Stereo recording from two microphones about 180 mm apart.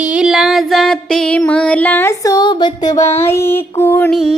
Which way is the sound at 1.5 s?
5° left (ahead or behind).